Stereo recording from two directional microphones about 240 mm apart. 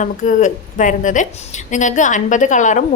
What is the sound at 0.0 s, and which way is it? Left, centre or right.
A woman's voice, left.